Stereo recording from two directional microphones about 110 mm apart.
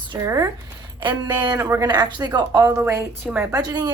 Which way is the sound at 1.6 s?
25° right (ahead or behind).